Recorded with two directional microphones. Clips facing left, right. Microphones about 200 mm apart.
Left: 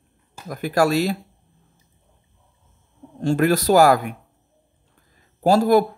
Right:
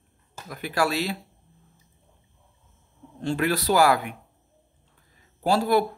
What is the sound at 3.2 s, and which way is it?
Speech, 45° left (ahead or behind).